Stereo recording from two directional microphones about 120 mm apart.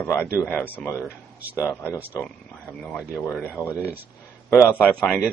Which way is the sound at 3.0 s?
15° right (ahead or behind).